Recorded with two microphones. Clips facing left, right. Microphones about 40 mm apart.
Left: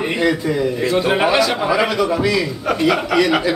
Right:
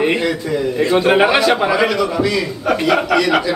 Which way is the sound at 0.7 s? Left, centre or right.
Centre.